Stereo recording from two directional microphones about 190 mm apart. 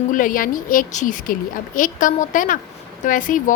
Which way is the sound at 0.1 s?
45° left (ahead or behind).